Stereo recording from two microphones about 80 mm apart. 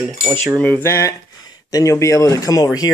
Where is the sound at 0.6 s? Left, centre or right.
Centre.